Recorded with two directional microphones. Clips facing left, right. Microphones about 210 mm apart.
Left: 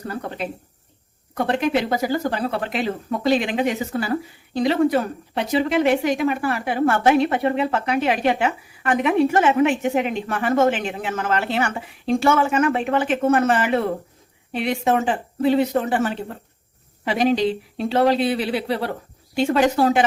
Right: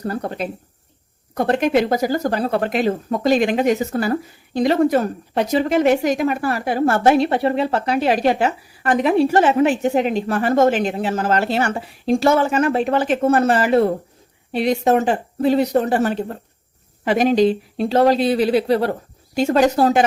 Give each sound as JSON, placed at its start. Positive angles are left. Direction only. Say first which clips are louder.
{"t": 0.1, "sound": "a woman's voice", "louder": "right 1 dB", "side_deg": -40}